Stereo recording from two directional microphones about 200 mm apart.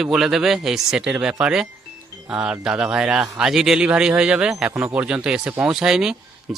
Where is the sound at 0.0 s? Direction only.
Centre (ahead or behind).